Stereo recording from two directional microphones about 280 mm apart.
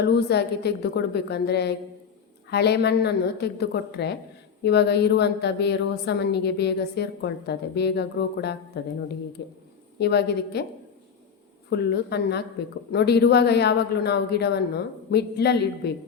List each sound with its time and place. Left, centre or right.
0.0 s a woman's voice: left
11.7 s a woman's voice: left